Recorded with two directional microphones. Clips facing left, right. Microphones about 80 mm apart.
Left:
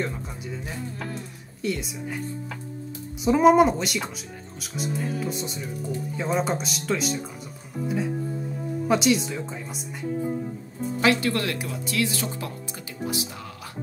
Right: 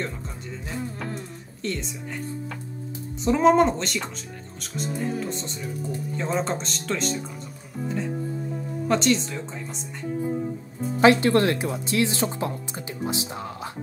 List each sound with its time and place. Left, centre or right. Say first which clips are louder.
0.0 s speech: left 2 dB; centre
3.3 s speech: left 1 dB; centre
8.8 s speech: even; centre
11.0 s speech: right 6 dB; right